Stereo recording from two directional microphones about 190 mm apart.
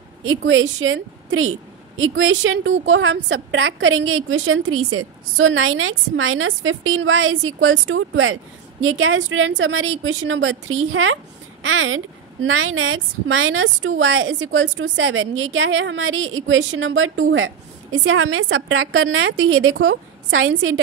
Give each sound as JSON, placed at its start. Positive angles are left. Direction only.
{"t": 0.2, "sound": "a woman's voice", "side_deg": -90}